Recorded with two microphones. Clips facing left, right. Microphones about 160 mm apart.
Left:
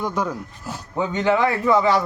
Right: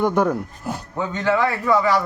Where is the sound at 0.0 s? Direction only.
55° right (ahead or behind).